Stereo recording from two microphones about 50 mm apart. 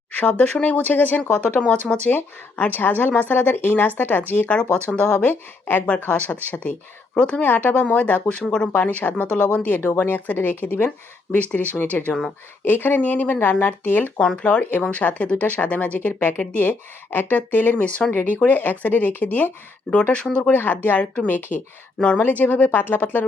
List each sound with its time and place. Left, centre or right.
0.2 s speech: left
2.0 s speech: left
4.4 s speech: left
5.3 s speech: left
7.4 s speech: left
9.6 s speech: left
14.2 s speech: centre
14.4 s speech: left
14.8 s speech: left
20.6 s speech: left